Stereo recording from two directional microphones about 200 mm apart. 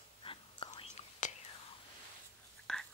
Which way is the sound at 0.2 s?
25° left (ahead or behind).